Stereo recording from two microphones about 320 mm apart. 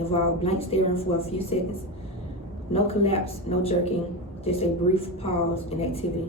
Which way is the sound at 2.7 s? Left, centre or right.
Centre.